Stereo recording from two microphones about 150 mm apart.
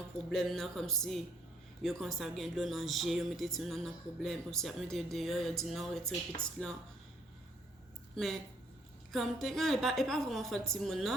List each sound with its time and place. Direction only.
0.3 s speech: centre (ahead or behind)
8.1 s a woman's voice: centre (ahead or behind)